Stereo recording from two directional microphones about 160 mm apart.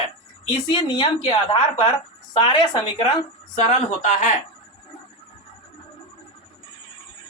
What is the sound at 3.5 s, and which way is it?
Speech, 45° left (ahead or behind).